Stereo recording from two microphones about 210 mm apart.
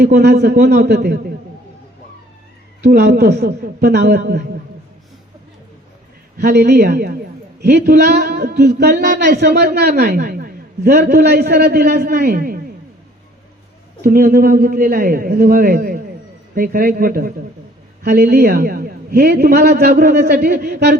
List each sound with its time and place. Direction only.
0.0 s speech: 50° right (ahead or behind)
2.8 s speech: 45° right (ahead or behind)
6.3 s speech: 50° right (ahead or behind)
14.0 s speech: 45° right (ahead or behind)